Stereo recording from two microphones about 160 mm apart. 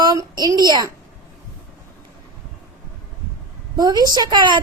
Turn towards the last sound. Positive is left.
turn(degrees=-25)  # may be behind; listen again after turning